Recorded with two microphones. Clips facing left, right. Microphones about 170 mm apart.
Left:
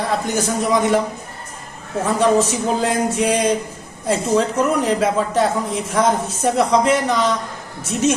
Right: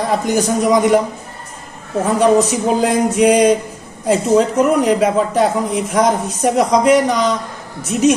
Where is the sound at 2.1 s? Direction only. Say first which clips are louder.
Right 3 dB; 10° right (ahead or behind).